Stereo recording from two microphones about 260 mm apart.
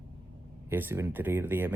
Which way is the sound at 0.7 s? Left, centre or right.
Centre.